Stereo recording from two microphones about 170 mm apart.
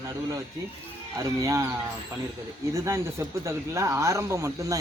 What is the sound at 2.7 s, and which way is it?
Speech, 15° right (ahead or behind).